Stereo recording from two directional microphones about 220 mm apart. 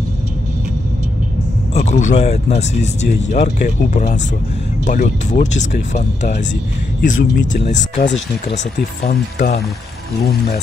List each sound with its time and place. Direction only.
1.7 s a man's voice: 30° left (ahead or behind)
9.0 s speech: 45° left (ahead or behind)